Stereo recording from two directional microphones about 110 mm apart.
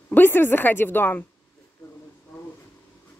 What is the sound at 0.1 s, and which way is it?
Speech, 20° left (ahead or behind).